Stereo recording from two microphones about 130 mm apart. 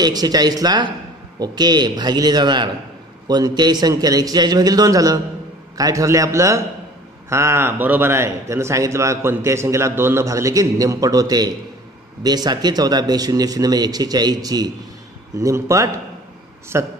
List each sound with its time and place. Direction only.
0.0 s a man's voice: 30° right (ahead or behind)